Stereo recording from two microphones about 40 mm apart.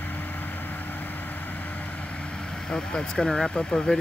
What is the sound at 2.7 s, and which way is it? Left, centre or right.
Speech, left.